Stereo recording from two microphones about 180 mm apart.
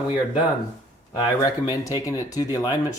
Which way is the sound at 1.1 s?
20° left (ahead or behind).